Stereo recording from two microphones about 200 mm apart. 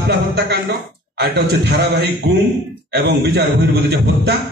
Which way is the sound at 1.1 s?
55° right (ahead or behind).